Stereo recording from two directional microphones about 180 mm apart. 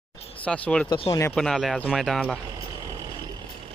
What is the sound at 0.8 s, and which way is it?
Speech, 25° left (ahead or behind).